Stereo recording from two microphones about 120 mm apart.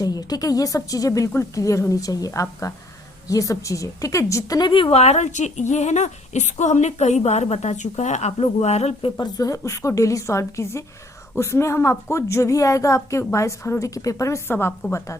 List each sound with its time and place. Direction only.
0.0 s a woman's voice: 35° left (ahead or behind)
4.7 s speech: 50° left (ahead or behind)
9.1 s a woman's voice: 30° left (ahead or behind)